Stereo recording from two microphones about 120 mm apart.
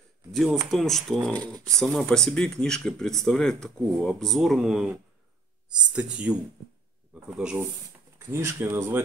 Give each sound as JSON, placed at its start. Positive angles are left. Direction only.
{"t": 0.3, "sound": "speech", "side_deg": 0}
{"t": 5.9, "sound": "speech", "side_deg": -10}
{"t": 8.2, "sound": "speech", "side_deg": -20}